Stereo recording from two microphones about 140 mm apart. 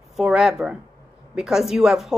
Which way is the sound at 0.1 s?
Centre (ahead or behind).